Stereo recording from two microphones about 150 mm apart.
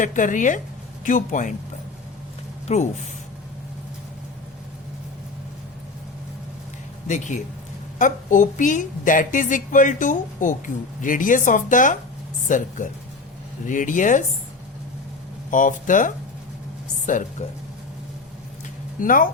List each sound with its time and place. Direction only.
0.0 s a woman's voice: 55° left (ahead or behind)
2.7 s speech: 45° left (ahead or behind)
7.9 s a woman's voice: 60° left (ahead or behind)
15.4 s a woman's voice: 60° left (ahead or behind)
18.9 s speech: 65° left (ahead or behind)